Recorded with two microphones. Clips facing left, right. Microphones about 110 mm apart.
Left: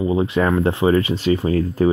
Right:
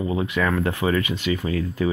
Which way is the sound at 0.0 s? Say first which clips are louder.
Left 5 dB; 25° left (ahead or behind).